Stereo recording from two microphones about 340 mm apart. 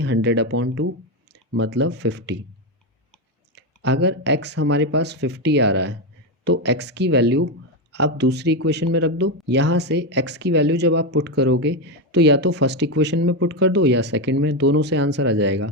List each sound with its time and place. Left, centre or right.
0.0 s speech: right
3.5 s speech: right